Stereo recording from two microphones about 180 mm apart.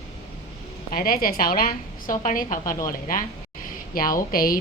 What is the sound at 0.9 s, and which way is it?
A woman's voice, 55° left (ahead or behind).